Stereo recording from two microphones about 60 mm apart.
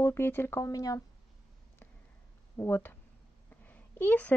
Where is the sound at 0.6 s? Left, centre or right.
Left.